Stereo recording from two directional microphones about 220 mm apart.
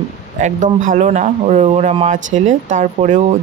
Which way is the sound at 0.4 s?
35° right (ahead or behind).